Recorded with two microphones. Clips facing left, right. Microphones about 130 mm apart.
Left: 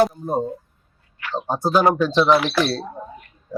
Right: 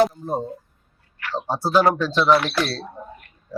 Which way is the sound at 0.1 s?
Centre (ahead or behind).